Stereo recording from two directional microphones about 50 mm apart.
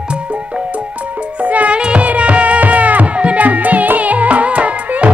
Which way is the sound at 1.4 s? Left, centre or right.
Right.